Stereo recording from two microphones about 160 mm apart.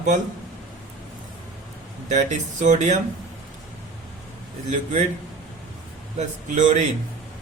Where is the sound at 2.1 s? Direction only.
50° right (ahead or behind).